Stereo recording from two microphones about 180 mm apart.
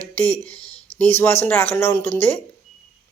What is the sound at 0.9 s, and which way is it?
Speech, 15° left (ahead or behind).